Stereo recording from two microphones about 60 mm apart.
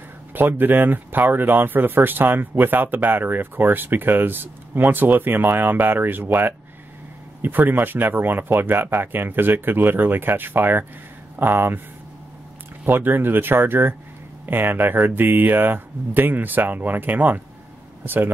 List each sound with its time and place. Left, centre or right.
0.3 s speech: right
12.8 s speech: right